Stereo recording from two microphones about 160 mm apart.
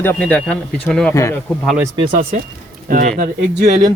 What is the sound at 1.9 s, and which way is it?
Speech, 35° right (ahead or behind).